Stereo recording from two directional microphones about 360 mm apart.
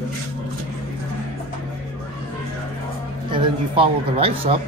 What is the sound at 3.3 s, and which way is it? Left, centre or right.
A man's voice, centre.